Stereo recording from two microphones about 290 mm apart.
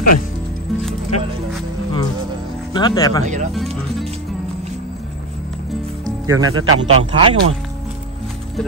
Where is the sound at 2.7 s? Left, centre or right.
Centre.